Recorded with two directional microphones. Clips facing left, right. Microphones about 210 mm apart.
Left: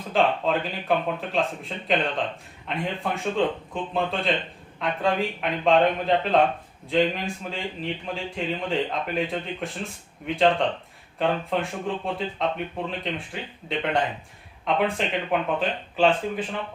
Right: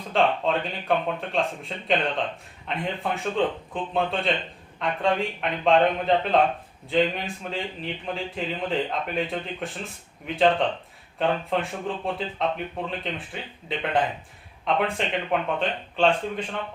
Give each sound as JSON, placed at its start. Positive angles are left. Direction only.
{"t": 0.1, "sound": "a man's voice", "side_deg": 0}